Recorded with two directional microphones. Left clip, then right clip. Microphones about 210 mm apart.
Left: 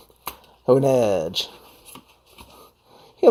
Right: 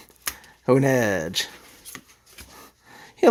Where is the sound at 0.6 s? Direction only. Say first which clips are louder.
Left 3 dB; 65° right (ahead or behind).